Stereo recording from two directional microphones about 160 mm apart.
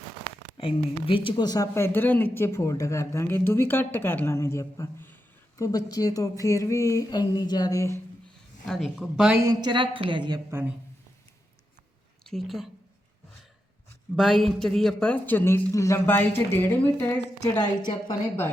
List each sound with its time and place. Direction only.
0.5 s speech: 35° left (ahead or behind); by 5.1 s 15° left (ahead or behind)
5.5 s a sound: 20° left (ahead or behind)
8.6 s speech: centre (ahead or behind)
9.4 s a woman's voice: 25° right (ahead or behind)
12.2 s speech: centre (ahead or behind)
14.2 s speech: centre (ahead or behind)